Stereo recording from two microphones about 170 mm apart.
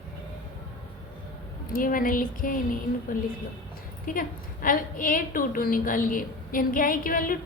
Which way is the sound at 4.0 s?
55° left (ahead or behind).